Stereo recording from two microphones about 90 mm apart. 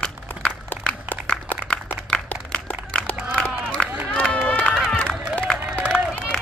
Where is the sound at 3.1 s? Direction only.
15° right (ahead or behind).